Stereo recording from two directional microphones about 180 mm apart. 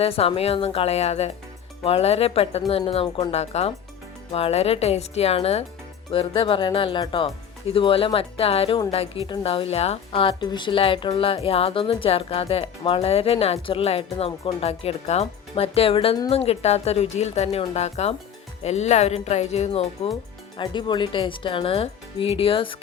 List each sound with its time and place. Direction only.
0.0 s a woman's voice: 35° left (ahead or behind)